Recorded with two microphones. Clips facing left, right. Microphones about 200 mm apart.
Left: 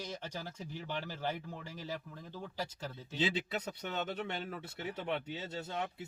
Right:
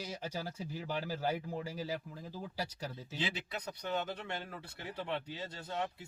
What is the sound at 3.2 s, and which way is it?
Speech, 25° left (ahead or behind).